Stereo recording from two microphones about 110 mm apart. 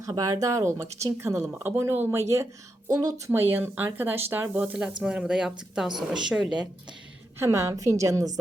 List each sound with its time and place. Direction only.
0.0 s speech: 35° right (ahead or behind)
3.3 s a woman's voice: 20° right (ahead or behind)
7.3 s speech: 30° right (ahead or behind)